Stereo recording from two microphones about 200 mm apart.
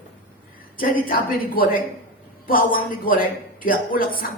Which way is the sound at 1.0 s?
45° left (ahead or behind).